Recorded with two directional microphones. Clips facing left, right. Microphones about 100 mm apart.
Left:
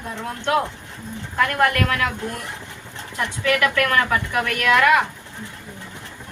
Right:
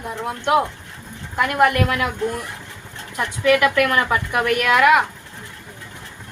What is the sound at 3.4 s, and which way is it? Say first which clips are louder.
A woman's voice: right 4 dB; 20° right (ahead or behind).